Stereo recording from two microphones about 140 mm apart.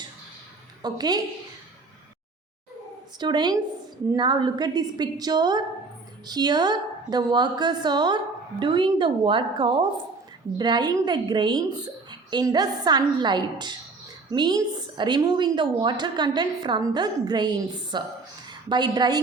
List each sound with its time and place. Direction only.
0.8 s a woman's voice: 30° right (ahead or behind)
3.2 s a woman's voice: 30° right (ahead or behind)